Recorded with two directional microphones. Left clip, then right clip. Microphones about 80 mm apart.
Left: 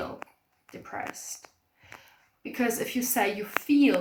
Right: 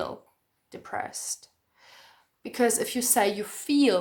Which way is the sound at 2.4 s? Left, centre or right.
Right.